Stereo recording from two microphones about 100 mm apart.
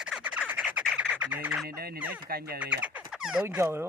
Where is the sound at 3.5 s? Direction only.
25° right (ahead or behind).